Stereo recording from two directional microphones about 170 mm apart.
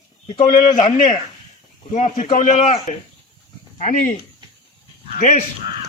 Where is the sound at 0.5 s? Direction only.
50° left (ahead or behind).